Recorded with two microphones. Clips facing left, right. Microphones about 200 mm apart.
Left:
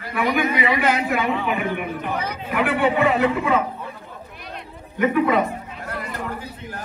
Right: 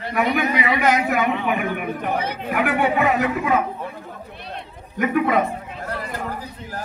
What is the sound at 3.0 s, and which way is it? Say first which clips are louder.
Speech: left 2 dB; 30° left (ahead or behind).